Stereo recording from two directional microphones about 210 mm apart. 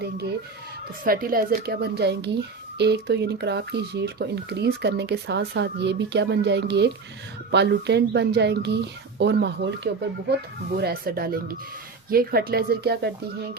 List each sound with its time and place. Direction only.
1.0 s speech: 45° right (ahead or behind)